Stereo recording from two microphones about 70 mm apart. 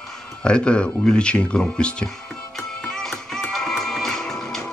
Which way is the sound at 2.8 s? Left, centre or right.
Centre.